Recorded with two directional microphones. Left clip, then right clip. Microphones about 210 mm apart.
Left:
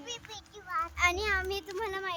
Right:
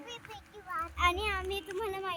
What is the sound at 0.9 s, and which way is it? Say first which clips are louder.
A child's voice: left 1 dB; 25° left (ahead or behind).